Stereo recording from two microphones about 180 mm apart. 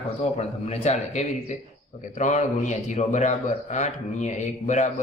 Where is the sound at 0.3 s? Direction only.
35° left (ahead or behind).